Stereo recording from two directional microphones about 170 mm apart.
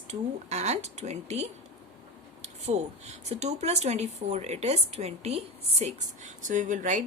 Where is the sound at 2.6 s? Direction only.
40° right (ahead or behind).